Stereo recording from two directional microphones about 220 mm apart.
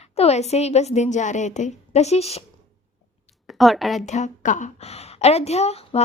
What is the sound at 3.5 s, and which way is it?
Speech, centre (ahead or behind).